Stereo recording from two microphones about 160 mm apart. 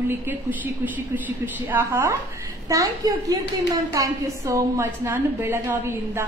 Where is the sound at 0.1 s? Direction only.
10° right (ahead or behind).